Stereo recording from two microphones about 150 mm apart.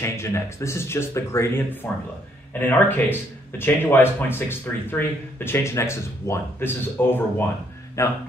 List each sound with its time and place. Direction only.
0.0 s a man's voice: 20° left (ahead or behind)